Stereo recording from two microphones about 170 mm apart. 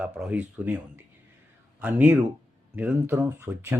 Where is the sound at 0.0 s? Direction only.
5° right (ahead or behind).